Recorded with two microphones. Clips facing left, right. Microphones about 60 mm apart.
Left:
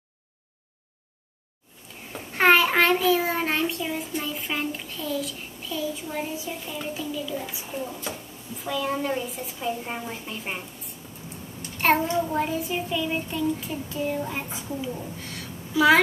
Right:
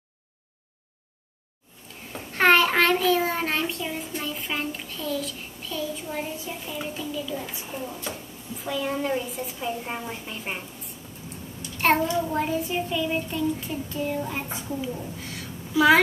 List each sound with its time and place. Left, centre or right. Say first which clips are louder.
2.1 s child singing: even; centre
11.8 s a child's voice: even; centre
12.3 s child singing: even; centre